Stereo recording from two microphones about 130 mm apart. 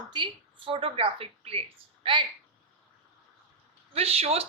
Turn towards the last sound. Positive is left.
turn(degrees=-50)  # may be behind; listen again after turning